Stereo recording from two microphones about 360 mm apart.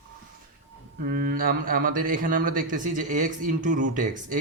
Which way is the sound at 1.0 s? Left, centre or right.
Right.